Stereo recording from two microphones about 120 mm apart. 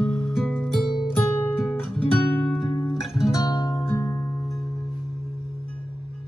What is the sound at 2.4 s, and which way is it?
Music, centre (ahead or behind).